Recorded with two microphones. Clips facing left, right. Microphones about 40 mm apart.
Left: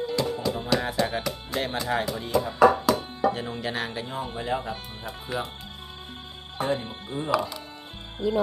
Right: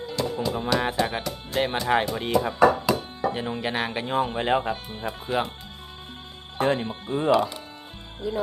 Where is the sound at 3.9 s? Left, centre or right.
Right.